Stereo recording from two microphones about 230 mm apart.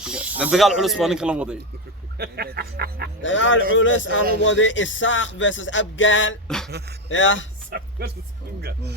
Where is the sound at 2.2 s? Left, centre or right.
Right.